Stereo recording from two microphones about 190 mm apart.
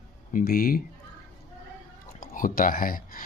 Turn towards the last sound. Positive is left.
turn(degrees=50)  # may be behind; listen again after turning